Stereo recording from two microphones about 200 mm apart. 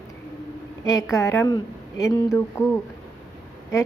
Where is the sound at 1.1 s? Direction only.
15° left (ahead or behind).